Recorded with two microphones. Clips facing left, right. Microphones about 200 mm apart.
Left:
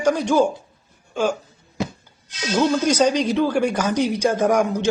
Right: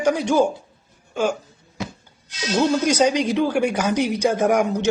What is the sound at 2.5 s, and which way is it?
Speech, 10° right (ahead or behind).